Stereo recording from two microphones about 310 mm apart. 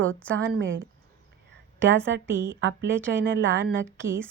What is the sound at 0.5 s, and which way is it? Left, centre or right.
Speech, right.